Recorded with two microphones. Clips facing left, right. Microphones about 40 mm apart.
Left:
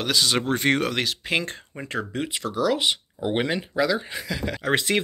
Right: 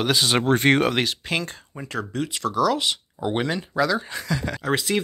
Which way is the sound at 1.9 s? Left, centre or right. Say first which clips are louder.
Right 1 dB; left.